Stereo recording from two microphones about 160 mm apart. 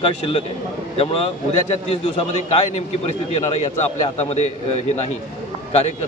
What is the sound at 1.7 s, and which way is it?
A man's voice, 40° left (ahead or behind).